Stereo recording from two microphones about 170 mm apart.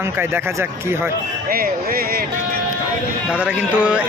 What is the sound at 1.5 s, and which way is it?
Speech, 60° right (ahead or behind).